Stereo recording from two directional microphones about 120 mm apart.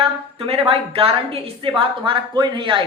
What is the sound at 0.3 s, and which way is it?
A woman's voice, 55° right (ahead or behind).